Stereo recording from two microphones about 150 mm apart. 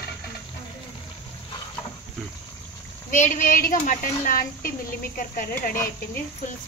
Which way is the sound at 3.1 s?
60° left (ahead or behind).